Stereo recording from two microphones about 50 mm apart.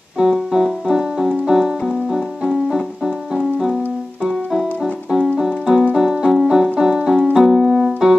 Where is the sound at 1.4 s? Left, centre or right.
Centre.